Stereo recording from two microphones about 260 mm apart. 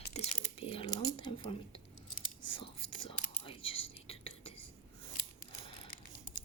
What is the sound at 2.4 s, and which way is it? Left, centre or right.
Whispering, centre.